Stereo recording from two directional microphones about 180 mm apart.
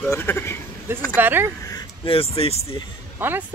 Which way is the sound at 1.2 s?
10° right (ahead or behind).